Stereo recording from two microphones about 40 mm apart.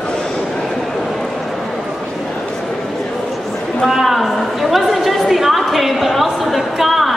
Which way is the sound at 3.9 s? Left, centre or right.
Centre.